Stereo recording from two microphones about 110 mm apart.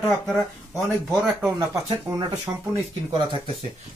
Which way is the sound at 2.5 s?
25° right (ahead or behind).